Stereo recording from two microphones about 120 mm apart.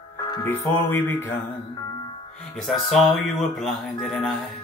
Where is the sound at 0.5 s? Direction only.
20° left (ahead or behind).